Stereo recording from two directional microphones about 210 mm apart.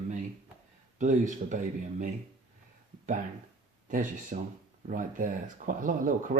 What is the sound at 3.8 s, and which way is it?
Speech, 40° right (ahead or behind).